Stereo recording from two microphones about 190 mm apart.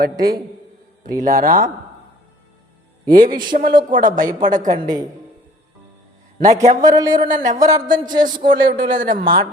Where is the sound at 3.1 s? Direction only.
45° right (ahead or behind).